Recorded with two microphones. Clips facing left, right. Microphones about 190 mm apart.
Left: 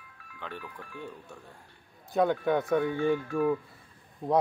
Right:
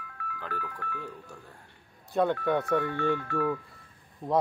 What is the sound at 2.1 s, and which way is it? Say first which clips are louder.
Speech: left 1 dB; centre (ahead or behind).